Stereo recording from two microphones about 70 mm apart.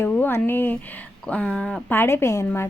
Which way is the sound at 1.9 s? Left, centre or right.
Left.